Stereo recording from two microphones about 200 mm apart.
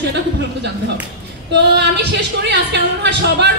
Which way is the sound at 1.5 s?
60° right (ahead or behind).